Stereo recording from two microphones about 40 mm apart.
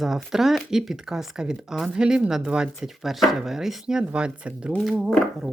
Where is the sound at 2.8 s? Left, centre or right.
Centre.